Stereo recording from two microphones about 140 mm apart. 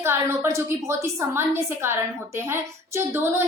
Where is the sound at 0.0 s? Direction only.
20° right (ahead or behind).